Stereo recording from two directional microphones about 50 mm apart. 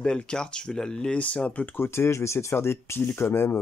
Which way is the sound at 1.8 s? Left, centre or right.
Left.